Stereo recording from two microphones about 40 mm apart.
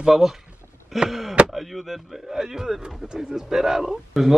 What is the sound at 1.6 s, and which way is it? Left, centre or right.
Speech, centre.